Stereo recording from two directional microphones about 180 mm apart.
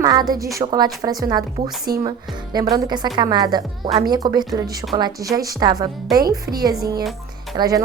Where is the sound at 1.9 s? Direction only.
60° right (ahead or behind).